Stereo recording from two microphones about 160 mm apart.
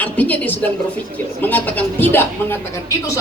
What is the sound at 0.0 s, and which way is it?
A woman's voice, 10° left (ahead or behind).